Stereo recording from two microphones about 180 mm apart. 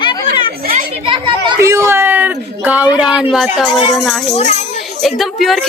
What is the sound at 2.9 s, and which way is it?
A woman's voice, 5° right (ahead or behind).